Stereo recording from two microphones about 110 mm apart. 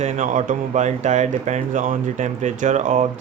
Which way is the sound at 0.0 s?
90° right.